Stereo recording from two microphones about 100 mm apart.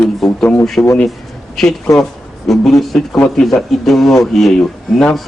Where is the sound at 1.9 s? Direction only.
Centre (ahead or behind).